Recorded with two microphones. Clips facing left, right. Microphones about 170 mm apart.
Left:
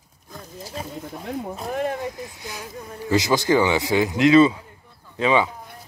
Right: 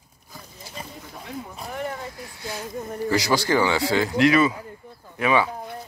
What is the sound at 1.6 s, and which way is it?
Speech, 35° left (ahead or behind).